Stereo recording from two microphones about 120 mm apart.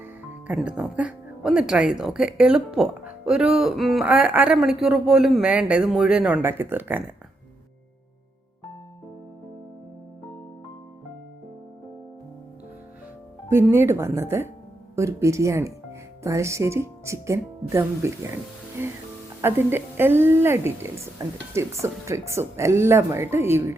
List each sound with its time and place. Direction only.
0.4 s speech: 10° right (ahead or behind)
13.5 s speech: 20° right (ahead or behind)